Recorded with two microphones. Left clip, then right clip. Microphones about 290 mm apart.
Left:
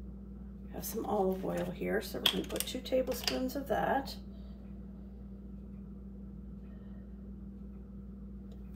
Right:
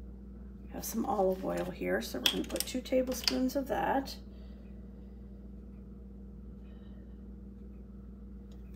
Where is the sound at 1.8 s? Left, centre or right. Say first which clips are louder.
Right 1 dB; centre.